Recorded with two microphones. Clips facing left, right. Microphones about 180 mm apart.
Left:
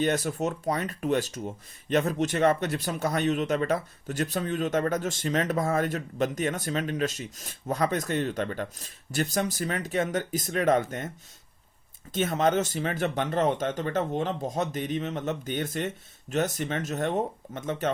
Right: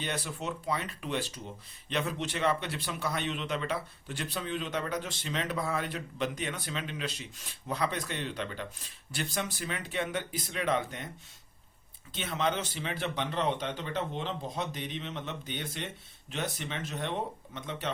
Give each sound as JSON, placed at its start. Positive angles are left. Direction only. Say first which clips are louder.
{"t": 0.0, "sound": "speech", "louder": "left 10 dB", "side_deg": 45}
{"t": 12.1, "sound": "speech", "louder": "left 7 dB", "side_deg": 45}